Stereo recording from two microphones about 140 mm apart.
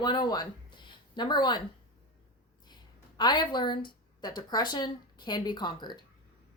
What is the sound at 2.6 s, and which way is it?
Speech, 30° left (ahead or behind).